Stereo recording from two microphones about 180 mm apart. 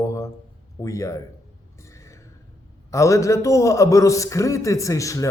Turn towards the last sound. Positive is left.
turn(degrees=20)  # may be behind; listen again after turning